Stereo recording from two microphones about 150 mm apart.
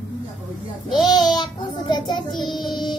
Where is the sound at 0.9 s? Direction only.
30° left (ahead or behind).